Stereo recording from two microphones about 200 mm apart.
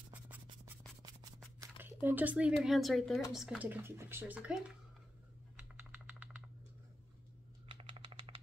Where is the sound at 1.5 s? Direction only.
10° right (ahead or behind).